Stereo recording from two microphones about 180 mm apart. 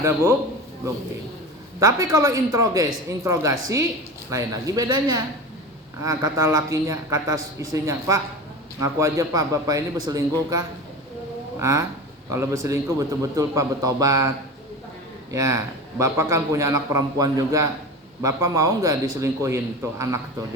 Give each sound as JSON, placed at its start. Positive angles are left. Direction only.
{"t": 0.0, "sound": "a man's voice", "side_deg": -15}
{"t": 1.8, "sound": "a man's voice", "side_deg": -20}
{"t": 11.6, "sound": "a man's voice", "side_deg": -15}